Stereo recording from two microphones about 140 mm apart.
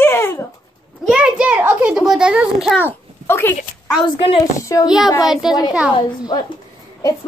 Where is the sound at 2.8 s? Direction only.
15° left (ahead or behind).